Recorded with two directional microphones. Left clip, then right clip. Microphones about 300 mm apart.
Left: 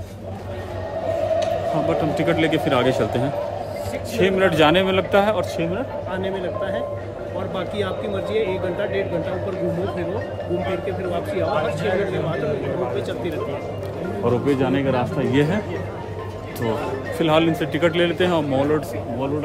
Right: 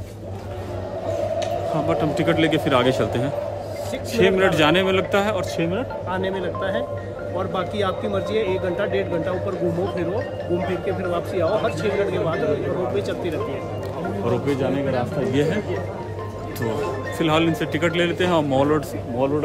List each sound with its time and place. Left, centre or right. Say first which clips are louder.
1.9 s speech: right 1 dB; centre
14.4 s speech: left 2 dB; left
17.2 s speech: left 2 dB; centre